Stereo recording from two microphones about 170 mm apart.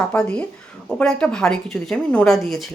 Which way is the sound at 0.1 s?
5° left (ahead or behind).